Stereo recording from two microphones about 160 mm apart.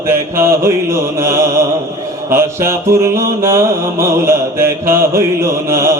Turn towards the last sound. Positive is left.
turn(degrees=-15)  # may be behind; listen again after turning